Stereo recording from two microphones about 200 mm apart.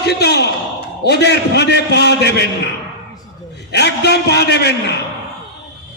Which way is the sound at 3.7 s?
55° left (ahead or behind).